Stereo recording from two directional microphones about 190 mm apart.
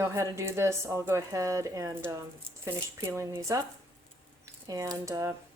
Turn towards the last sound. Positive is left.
turn(degrees=-15)  # may be behind; listen again after turning